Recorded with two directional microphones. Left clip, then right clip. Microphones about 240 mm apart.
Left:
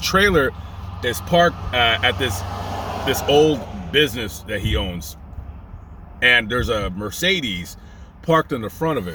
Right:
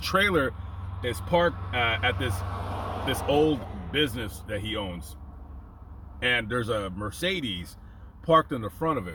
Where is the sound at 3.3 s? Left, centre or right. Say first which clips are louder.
Left 8 dB; centre.